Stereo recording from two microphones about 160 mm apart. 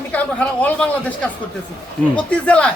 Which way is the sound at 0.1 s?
10° left (ahead or behind).